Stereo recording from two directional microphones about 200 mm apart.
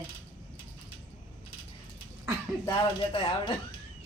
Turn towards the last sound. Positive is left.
turn(degrees=25)  # may be behind; listen again after turning